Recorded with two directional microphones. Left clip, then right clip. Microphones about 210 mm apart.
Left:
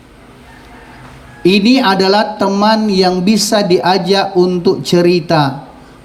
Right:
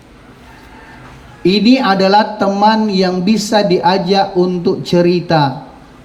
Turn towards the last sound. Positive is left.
turn(degrees=50)  # may be behind; listen again after turning